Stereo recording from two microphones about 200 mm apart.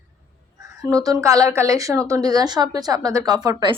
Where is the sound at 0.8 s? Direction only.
15° right (ahead or behind).